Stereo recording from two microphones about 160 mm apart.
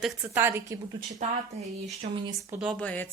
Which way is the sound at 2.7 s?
10° left (ahead or behind).